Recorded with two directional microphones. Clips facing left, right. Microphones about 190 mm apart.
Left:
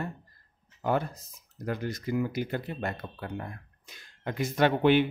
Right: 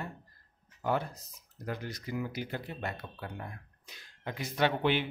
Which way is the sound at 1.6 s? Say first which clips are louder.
Left 6 dB; 50° left (ahead or behind).